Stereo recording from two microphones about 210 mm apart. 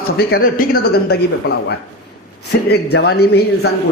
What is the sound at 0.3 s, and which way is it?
Speech, 45° left (ahead or behind).